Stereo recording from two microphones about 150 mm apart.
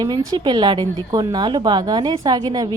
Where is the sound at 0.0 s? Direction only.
25° right (ahead or behind).